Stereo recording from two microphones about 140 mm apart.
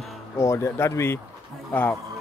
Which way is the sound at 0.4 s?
20° left (ahead or behind).